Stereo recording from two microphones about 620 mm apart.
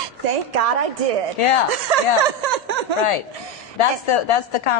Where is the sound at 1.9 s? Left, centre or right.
Right.